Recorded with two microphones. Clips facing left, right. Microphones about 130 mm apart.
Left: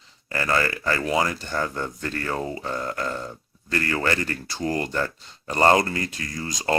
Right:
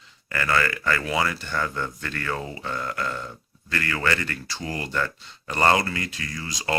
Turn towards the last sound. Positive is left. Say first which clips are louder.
# left 3 dB
turn(degrees=40)  # may be behind; listen again after turning